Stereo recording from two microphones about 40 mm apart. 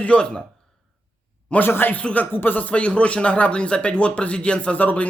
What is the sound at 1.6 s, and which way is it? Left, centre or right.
Speech, left.